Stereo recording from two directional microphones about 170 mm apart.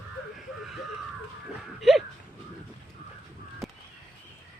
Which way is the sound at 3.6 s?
Centre (ahead or behind).